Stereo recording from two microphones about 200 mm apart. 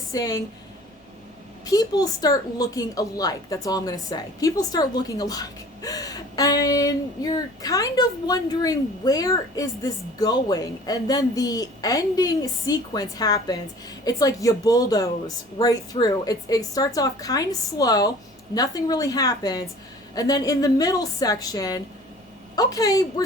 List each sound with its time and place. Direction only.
0.1 s speech: 20° left (ahead or behind)
1.6 s speech: 20° left (ahead or behind)